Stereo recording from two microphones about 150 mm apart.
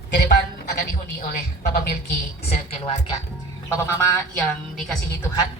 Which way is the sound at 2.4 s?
50° left (ahead or behind).